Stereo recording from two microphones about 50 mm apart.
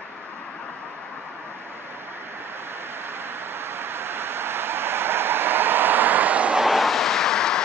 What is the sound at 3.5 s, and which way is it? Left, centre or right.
Vehicle, right.